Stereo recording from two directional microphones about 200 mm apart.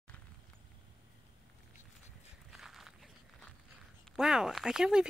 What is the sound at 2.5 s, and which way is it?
Walk, centre (ahead or behind).